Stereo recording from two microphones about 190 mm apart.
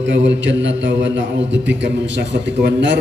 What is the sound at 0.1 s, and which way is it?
A man's voice, 75° right (ahead or behind).